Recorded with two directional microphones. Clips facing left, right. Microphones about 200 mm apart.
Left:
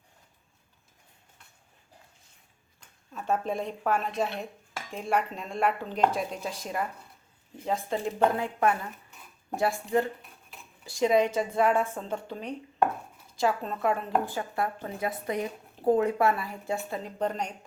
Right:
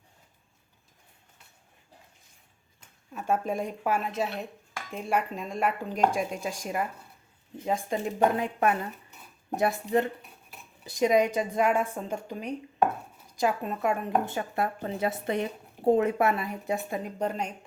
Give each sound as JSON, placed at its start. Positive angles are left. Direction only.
{"t": 3.1, "sound": "a woman's voice", "side_deg": -10}
{"t": 14.3, "sound": "a woman's voice", "side_deg": -25}